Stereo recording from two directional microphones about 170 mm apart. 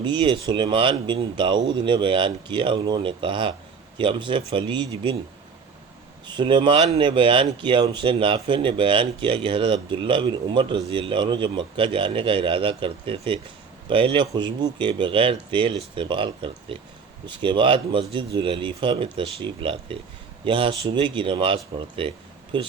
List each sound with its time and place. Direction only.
0.0 s speech: 25° right (ahead or behind)
6.2 s speech: 30° right (ahead or behind)